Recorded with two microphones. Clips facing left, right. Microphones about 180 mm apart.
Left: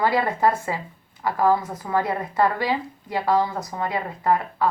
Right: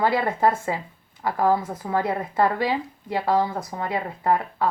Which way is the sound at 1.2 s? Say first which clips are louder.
Left 1 dB; 25° right (ahead or behind).